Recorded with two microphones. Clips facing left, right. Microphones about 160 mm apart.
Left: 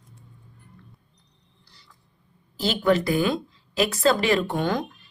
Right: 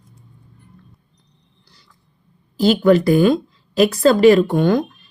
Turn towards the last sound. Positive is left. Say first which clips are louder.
# right 9 dB
turn(degrees=-50)  # may be behind; listen again after turning